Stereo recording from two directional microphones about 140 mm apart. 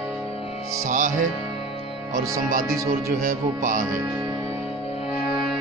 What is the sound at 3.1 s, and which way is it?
Speech, 85° right.